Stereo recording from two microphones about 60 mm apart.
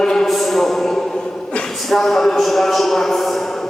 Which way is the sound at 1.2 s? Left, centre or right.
Centre.